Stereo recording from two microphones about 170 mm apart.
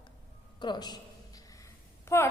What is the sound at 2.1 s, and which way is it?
Speech, 15° left (ahead or behind).